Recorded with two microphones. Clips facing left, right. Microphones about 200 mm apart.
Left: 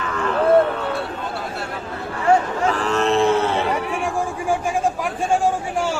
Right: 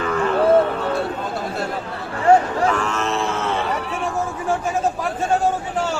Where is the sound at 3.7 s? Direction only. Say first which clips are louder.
Left 2 dB; 10° left (ahead or behind).